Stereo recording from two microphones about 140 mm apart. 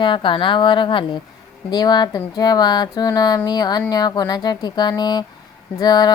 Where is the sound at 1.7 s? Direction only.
30° left (ahead or behind).